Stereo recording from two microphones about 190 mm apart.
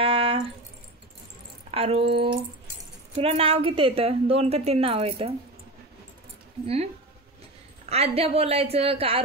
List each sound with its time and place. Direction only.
0.0 s a sound: 30° right (ahead or behind)
1.7 s speech: 30° right (ahead or behind)
3.2 s a woman's voice: 30° right (ahead or behind)
7.9 s a woman's voice: 30° right (ahead or behind)